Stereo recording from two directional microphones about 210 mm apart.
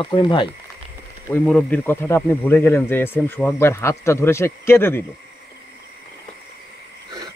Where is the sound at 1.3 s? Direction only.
5° left (ahead or behind).